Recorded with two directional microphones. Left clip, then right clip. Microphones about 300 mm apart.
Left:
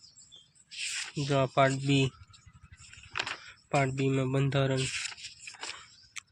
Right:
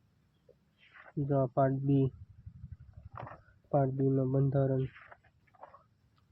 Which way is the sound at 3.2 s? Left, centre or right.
Centre.